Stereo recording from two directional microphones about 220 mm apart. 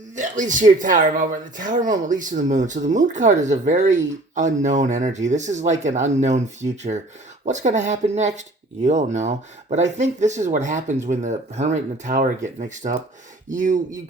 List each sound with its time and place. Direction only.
0.2 s speech: 35° right (ahead or behind)